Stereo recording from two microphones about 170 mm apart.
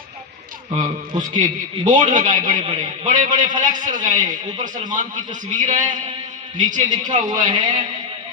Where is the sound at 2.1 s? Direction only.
50° right (ahead or behind).